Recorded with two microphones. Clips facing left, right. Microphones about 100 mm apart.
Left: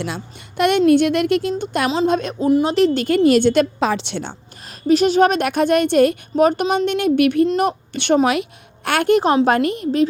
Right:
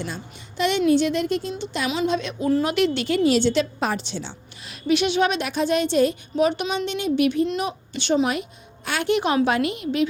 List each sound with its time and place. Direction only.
0.0 s a woman's voice: 65° left (ahead or behind); by 2.3 s 50° left (ahead or behind)
2.6 s a woman's voice: 35° left (ahead or behind); by 3.7 s 55° left (ahead or behind)
3.9 s a woman's voice: 70° left (ahead or behind)
4.2 s a woman's voice: 45° left (ahead or behind)